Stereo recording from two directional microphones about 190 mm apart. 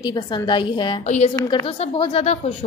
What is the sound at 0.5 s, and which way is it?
Speech, 25° left (ahead or behind).